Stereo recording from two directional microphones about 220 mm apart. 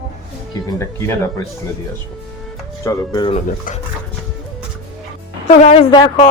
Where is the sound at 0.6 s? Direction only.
15° left (ahead or behind).